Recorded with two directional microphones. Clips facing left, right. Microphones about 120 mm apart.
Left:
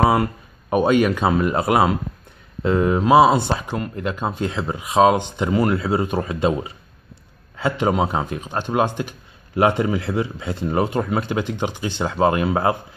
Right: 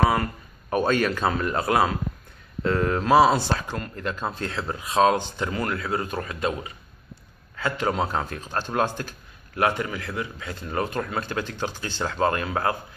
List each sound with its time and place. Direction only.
0.0 s speech: 25° left (ahead or behind)
12.4 s speech: 25° left (ahead or behind)